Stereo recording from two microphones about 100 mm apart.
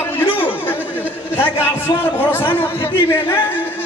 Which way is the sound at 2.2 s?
20° left (ahead or behind).